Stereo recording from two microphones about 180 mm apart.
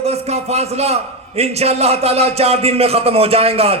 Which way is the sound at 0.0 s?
35° right (ahead or behind).